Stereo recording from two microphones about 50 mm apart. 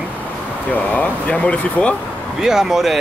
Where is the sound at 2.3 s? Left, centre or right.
Centre.